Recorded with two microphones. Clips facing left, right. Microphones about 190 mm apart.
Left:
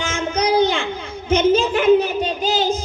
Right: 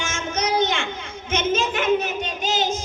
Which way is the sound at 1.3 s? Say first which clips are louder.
Left 7 dB; 35° left (ahead or behind).